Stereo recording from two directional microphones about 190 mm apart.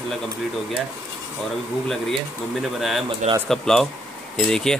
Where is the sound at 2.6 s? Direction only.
Centre (ahead or behind).